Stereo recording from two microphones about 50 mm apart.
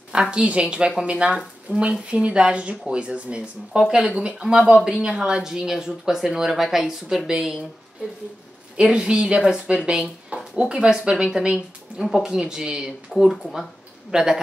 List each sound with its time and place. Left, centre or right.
0.1 s a woman's voice: centre
8.7 s a woman's voice: centre